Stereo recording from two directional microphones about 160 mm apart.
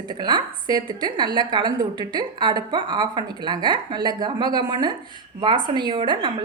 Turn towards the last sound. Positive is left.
turn(degrees=-30)  # may be behind; listen again after turning